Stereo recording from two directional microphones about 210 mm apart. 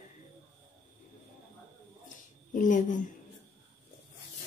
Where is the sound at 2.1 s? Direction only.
40° left (ahead or behind).